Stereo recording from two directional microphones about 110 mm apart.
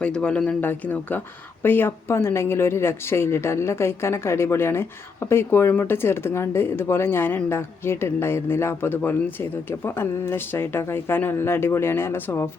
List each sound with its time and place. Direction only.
0.0 s speech: 10° left (ahead or behind)